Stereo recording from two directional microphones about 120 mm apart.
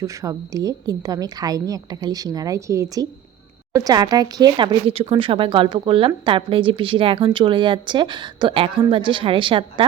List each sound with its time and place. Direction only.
0.0 s a woman's voice: 25° right (ahead or behind); by 9.8 s 45° right (ahead or behind)